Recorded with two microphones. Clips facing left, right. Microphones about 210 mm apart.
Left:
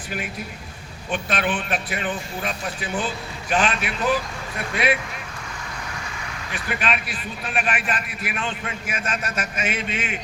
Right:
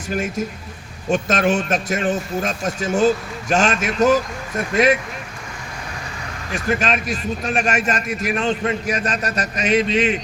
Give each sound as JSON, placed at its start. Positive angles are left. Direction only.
{"t": 0.1, "sound": "a man's voice", "side_deg": -45}
{"t": 6.5, "sound": "a man's voice", "side_deg": -40}